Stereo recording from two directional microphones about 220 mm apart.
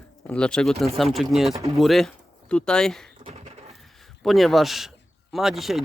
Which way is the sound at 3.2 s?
25° right (ahead or behind).